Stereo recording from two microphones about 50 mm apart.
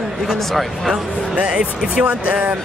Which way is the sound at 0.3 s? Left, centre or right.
Centre.